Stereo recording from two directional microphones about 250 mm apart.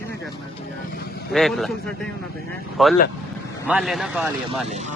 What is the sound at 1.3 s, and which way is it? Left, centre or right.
A man's voice, centre.